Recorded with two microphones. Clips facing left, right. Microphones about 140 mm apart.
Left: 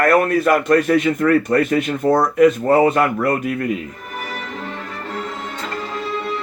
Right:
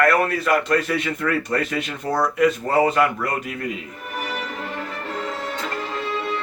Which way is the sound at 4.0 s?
10° right (ahead or behind).